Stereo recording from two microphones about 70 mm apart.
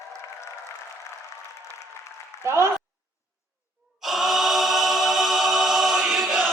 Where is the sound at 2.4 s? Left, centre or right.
Right.